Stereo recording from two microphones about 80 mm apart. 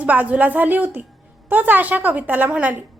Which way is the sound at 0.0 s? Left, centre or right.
Centre.